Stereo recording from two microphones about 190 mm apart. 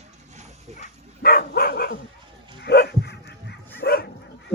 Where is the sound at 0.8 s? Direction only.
50° left (ahead or behind).